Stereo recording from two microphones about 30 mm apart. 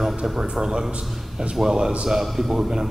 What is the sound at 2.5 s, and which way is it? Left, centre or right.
Speech, centre.